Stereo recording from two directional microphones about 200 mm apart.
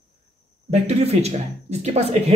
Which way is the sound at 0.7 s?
30° right (ahead or behind).